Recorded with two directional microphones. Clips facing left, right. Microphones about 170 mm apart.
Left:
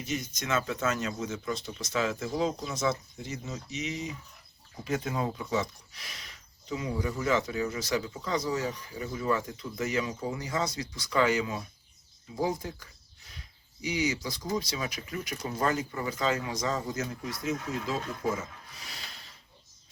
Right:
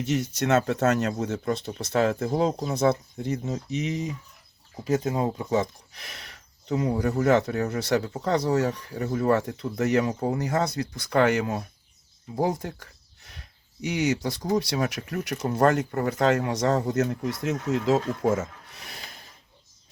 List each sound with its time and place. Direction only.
0.0 s speech: 75° right (ahead or behind); by 4.1 s 50° right (ahead or behind)
4.8 s speech: 40° right (ahead or behind)
7.0 s speech: 65° right (ahead or behind)
12.4 s speech: 60° right (ahead or behind); by 18.3 s 85° right
18.6 s a sound: 60° right (ahead or behind)